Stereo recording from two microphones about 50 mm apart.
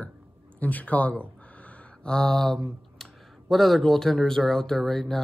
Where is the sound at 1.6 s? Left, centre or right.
Centre.